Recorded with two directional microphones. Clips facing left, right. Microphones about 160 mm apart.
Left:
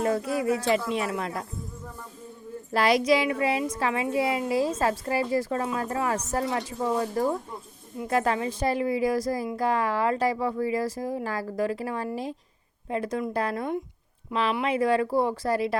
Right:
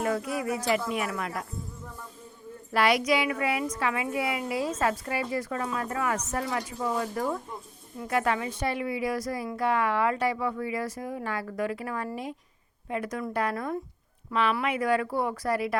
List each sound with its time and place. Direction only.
0.0 s speech: 30° left (ahead or behind)
2.7 s a woman's voice: 35° left (ahead or behind)